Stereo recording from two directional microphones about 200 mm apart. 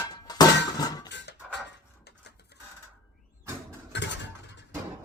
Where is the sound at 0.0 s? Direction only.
20° left (ahead or behind).